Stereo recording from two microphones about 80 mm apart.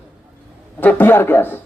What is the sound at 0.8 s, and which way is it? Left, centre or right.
Speech, left.